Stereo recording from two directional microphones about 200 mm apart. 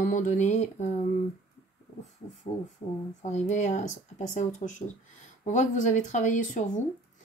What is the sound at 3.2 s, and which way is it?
Speech, 35° left (ahead or behind).